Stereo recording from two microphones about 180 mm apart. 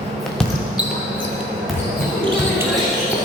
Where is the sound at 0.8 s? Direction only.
5° right (ahead or behind).